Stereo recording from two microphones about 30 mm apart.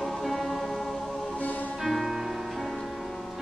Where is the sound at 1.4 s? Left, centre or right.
Left.